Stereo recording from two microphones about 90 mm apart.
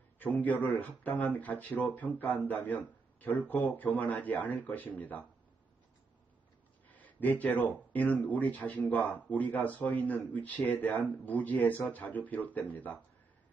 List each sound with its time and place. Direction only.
0.2 s speech: 20° left (ahead or behind)
6.8 s speech: 20° left (ahead or behind)